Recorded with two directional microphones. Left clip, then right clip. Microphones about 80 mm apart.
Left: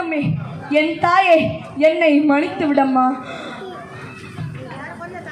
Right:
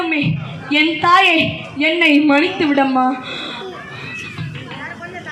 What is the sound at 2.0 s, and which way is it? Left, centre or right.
Speech, left.